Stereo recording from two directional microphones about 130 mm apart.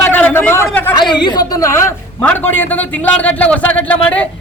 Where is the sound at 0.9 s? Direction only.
35° left (ahead or behind).